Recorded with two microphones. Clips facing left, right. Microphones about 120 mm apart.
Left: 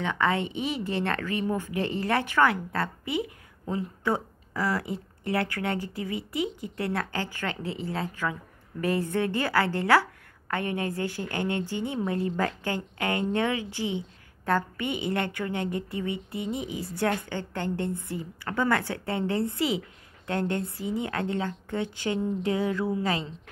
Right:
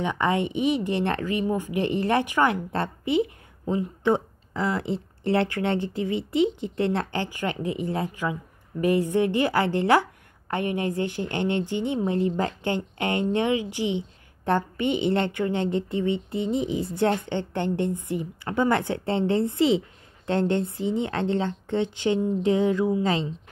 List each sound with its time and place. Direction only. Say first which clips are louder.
0.0 s a woman's voice: right 2 dB; 20° right (ahead or behind)